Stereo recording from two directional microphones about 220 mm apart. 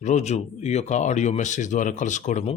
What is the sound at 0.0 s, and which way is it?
Speech, 30° left (ahead or behind).